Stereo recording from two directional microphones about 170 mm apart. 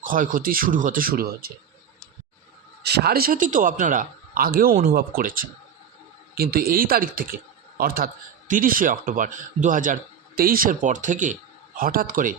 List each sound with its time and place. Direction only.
0.0 s a man's voice: 55° right (ahead or behind)
2.8 s a man's voice: 75° right (ahead or behind); by 12.4 s 55° right (ahead or behind)